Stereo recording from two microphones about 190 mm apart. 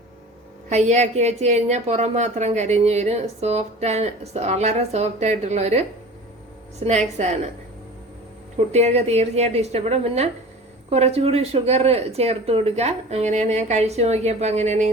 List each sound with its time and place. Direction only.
0.7 s a woman's voice: 35° right (ahead or behind)
8.5 s a woman's voice: 35° right (ahead or behind)